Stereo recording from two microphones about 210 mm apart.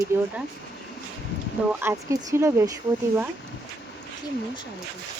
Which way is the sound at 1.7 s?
10° right (ahead or behind).